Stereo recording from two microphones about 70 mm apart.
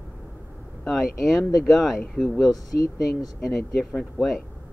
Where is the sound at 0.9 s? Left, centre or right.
Centre.